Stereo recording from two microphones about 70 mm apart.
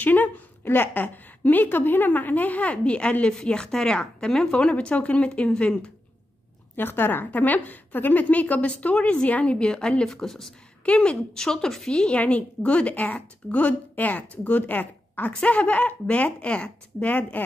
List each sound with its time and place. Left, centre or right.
0.0 s a woman's voice: left
6.8 s a woman's voice: left